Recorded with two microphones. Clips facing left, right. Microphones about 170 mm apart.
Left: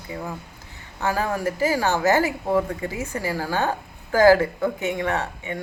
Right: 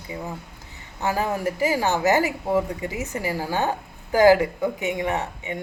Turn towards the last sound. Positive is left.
turn(degrees=-20)  # may be behind; listen again after turning